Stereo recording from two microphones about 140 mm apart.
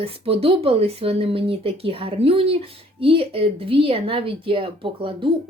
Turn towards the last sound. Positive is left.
turn(degrees=-40)  # may be behind; listen again after turning